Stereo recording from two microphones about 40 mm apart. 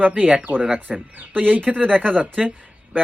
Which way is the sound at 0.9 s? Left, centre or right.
Centre.